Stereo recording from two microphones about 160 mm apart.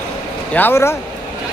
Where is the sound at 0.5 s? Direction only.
15° left (ahead or behind).